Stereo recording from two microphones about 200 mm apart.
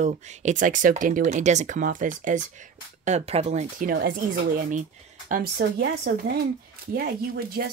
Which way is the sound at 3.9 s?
50° right (ahead or behind).